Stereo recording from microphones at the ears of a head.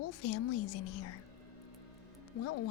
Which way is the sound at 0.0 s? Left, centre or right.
Left.